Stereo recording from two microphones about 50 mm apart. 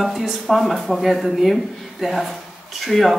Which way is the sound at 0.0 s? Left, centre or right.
Centre.